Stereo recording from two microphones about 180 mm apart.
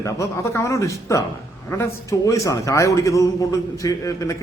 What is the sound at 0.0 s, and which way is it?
A man's voice, 15° left (ahead or behind).